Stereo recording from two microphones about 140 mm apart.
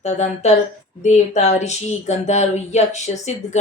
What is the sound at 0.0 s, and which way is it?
Speech, 55° left (ahead or behind).